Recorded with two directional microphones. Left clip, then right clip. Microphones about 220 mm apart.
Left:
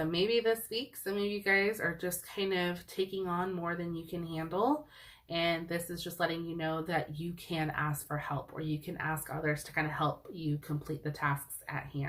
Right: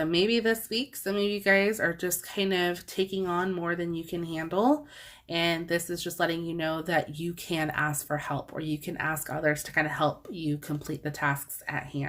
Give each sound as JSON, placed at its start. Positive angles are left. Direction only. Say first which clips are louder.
{"t": 0.0, "sound": "speech", "louder": "right 4 dB", "side_deg": -50}